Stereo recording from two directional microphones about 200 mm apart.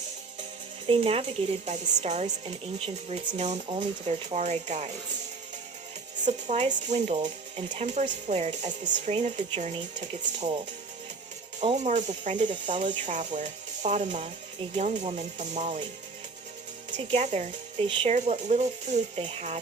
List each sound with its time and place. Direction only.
0.9 s speech: 30° right (ahead or behind)
6.2 s speech: 35° right (ahead or behind)
11.6 s speech: 30° right (ahead or behind)
12.7 s speech: 25° right (ahead or behind)
13.0 s speech: 35° right (ahead or behind)
17.0 s speech: 30° right (ahead or behind)